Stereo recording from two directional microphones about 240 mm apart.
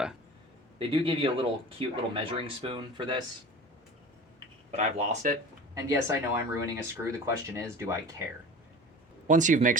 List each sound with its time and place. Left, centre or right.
0.8 s speech: right
4.7 s speech: right
5.7 s speech: centre
9.2 s speech: right